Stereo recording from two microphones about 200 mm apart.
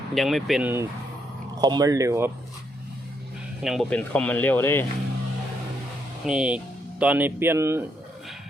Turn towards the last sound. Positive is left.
turn(degrees=-15)  # may be behind; listen again after turning